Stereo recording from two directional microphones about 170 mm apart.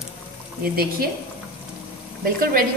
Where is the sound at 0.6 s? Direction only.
65° right (ahead or behind).